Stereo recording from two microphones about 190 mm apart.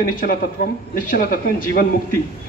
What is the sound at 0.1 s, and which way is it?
Speech, 45° left (ahead or behind).